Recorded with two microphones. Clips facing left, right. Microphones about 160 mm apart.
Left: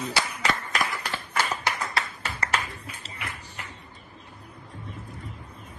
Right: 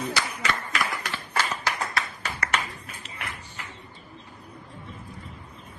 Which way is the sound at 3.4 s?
35° left (ahead or behind).